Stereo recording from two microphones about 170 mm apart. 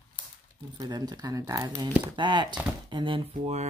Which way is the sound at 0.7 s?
25° right (ahead or behind).